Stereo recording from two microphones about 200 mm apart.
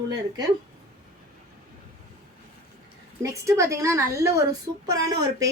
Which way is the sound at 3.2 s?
15° right (ahead or behind).